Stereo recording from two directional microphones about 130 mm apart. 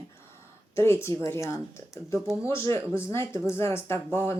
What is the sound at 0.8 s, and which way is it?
Speech, 20° left (ahead or behind).